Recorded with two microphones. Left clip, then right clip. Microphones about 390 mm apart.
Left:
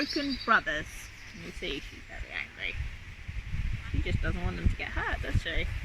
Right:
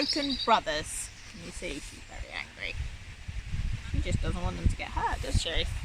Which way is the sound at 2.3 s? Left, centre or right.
Centre.